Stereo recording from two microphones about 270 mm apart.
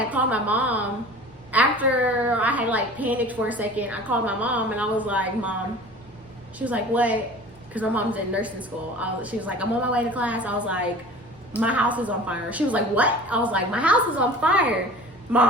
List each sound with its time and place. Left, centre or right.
0.1 s a woman's voice: centre
6.6 s a woman's voice: centre